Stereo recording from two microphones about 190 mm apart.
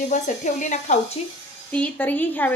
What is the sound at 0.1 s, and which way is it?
Speech, 40° left (ahead or behind).